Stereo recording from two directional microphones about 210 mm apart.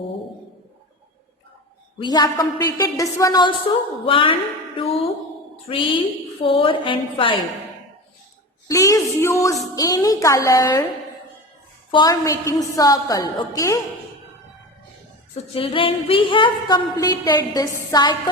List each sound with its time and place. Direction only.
2.0 s a woman's voice: 20° left (ahead or behind)
5.6 s a woman's voice: 25° left (ahead or behind)
8.6 s a woman's voice: 15° left (ahead or behind)
11.9 s a woman's voice: 20° left (ahead or behind)
15.5 s a woman's voice: 25° left (ahead or behind)